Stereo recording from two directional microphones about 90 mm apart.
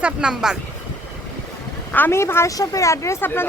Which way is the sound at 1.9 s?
25° left (ahead or behind).